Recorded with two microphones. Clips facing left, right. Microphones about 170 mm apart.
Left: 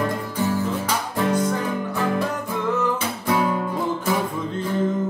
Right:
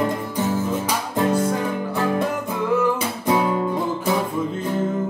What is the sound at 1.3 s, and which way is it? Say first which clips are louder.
Music: left 1 dB; 10° right (ahead or behind).